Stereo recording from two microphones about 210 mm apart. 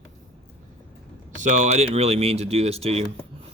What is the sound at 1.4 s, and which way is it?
Speech, 35° right (ahead or behind).